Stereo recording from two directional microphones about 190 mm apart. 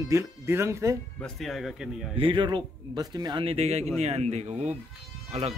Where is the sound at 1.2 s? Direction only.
Centre (ahead or behind).